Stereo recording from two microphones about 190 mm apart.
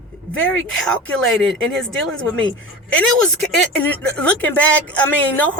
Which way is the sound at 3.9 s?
5° left (ahead or behind).